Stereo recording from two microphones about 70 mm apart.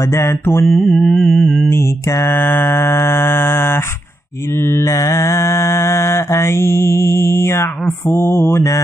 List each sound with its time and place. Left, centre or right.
0.0 s mantra: left
0.7 s music: centre
1.7 s mantra: left
2.3 s mantra: left
4.8 s mantra: left